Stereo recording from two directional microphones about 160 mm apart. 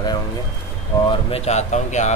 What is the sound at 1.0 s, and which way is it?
Speech, 40° left (ahead or behind).